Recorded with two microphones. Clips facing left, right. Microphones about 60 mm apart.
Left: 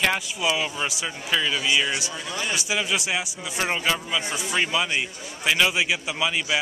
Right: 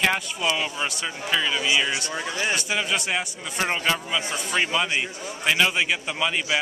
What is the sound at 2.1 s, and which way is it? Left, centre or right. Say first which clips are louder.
Speech: right 3 dB; right.